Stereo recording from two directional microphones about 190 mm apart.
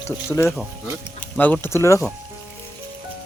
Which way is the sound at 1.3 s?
10° left (ahead or behind).